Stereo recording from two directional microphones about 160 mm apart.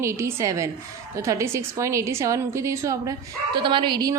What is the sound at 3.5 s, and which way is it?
Speech, 30° right (ahead or behind).